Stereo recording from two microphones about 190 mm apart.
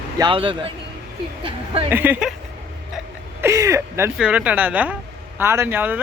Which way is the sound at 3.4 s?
15° right (ahead or behind).